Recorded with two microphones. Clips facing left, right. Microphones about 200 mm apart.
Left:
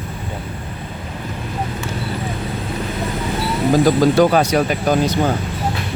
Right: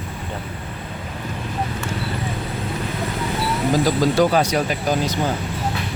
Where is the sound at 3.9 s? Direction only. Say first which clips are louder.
Left 4 dB; 55° left (ahead or behind).